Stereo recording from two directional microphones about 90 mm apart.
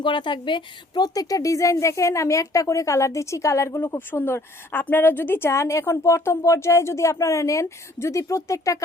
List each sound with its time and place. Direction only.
0.0 s a woman's voice: 60° left (ahead or behind); by 8.8 s 35° left (ahead or behind)